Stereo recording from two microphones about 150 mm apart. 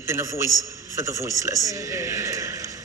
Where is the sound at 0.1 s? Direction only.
20° right (ahead or behind).